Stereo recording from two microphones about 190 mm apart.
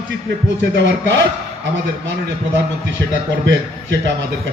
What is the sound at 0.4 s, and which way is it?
Speech, 70° right (ahead or behind).